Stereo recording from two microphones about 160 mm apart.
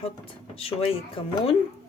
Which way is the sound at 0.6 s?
35° left (ahead or behind).